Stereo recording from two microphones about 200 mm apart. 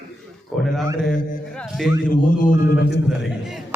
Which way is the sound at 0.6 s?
Centre (ahead or behind).